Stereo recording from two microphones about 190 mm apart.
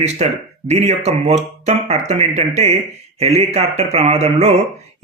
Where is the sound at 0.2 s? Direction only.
35° right (ahead or behind).